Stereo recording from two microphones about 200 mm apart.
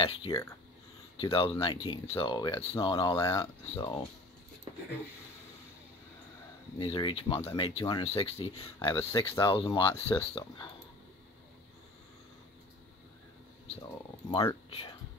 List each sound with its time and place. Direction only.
0.0 s speech: 25° left (ahead or behind)
6.8 s speech: 25° left (ahead or behind)
13.8 s speech: 25° left (ahead or behind)